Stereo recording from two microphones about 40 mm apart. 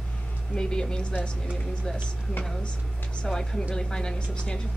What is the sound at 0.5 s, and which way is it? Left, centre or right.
Speech, centre.